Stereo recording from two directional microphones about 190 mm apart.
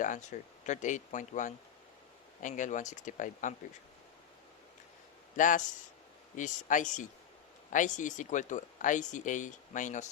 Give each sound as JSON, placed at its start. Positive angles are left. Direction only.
{"t": 0.0, "sound": "speech", "side_deg": 40}
{"t": 5.4, "sound": "speech", "side_deg": 45}